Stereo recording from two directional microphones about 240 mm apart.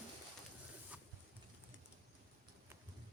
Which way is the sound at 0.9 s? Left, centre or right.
Centre.